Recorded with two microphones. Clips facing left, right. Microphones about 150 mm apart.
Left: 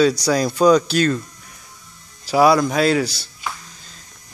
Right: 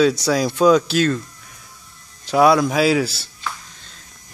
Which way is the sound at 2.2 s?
Centre (ahead or behind).